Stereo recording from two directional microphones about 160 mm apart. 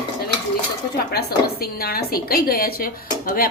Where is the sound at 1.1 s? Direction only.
75° left (ahead or behind).